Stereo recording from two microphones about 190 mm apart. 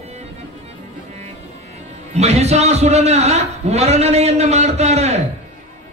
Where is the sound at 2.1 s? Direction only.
35° right (ahead or behind).